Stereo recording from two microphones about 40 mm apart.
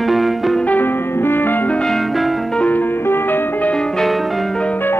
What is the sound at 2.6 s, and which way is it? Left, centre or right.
Music, left.